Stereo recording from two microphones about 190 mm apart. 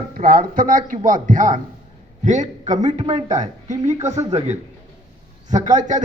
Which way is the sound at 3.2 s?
40° right (ahead or behind).